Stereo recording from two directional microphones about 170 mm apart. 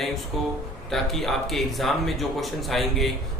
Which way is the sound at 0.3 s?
Centre (ahead or behind).